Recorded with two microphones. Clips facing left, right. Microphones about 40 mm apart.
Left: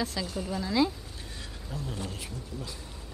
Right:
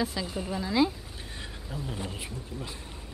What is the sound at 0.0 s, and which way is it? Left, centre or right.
Speech, centre.